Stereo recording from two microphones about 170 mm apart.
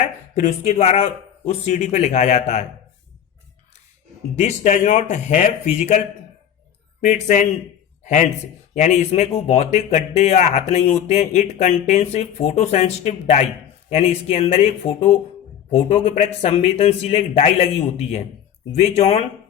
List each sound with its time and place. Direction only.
0.3 s a man's voice: 45° left (ahead or behind)
4.4 s a man's voice: 40° left (ahead or behind)
7.0 s a man's voice: 50° left (ahead or behind)